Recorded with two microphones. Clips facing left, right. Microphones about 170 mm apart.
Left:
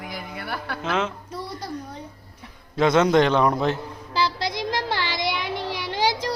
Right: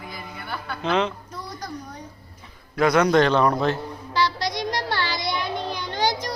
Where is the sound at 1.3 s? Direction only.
30° left (ahead or behind).